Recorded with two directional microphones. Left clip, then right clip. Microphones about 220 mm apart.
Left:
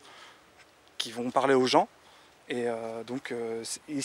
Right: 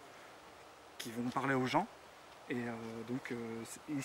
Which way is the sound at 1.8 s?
50° left (ahead or behind).